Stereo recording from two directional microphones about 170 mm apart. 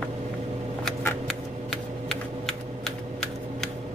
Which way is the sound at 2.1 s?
5° left (ahead or behind).